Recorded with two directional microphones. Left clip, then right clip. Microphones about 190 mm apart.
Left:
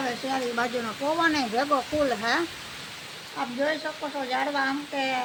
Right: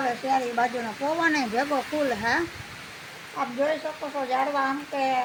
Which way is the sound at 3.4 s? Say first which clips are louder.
Right 2 dB; 20° right (ahead or behind).